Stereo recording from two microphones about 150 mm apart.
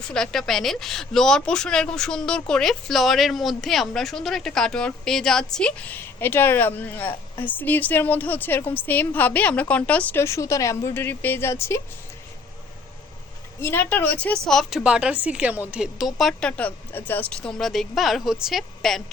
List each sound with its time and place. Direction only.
0.1 s a woman's voice: 5° left (ahead or behind)
13.6 s a woman's voice: 15° left (ahead or behind)